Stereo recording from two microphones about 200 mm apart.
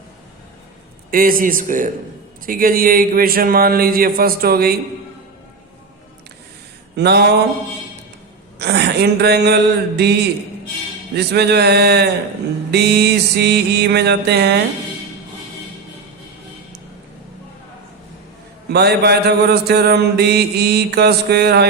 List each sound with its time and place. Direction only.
1.1 s mantra: 45° right (ahead or behind)
6.9 s mantra: 55° right (ahead or behind)
8.5 s mantra: 55° right (ahead or behind)
18.7 s mantra: 55° right (ahead or behind)